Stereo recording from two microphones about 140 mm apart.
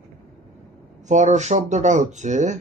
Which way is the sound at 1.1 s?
55° right (ahead or behind).